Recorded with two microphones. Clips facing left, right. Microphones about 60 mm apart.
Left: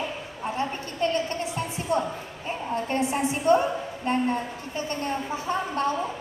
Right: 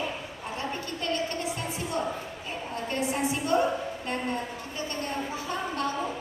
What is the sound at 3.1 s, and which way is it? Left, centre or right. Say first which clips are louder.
A woman's voice: left 5 dB; left.